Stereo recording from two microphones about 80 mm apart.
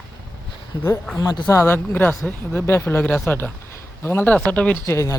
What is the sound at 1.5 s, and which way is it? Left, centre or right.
Speech, left.